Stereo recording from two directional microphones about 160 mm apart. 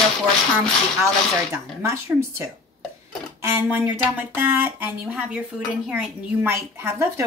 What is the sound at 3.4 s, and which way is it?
Speech, 15° right (ahead or behind).